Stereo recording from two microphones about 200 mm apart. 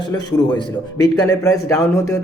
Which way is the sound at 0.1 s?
20° left (ahead or behind).